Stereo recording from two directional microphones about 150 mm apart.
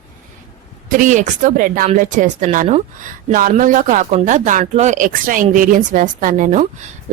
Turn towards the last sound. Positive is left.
turn(degrees=-55)  # may be behind; listen again after turning